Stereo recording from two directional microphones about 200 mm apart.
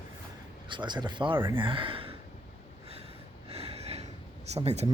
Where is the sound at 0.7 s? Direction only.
20° right (ahead or behind).